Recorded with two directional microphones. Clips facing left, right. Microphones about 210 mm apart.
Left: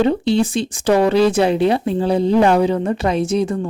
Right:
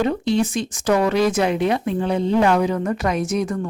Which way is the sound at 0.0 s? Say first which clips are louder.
Left 4 dB; 30° left (ahead or behind).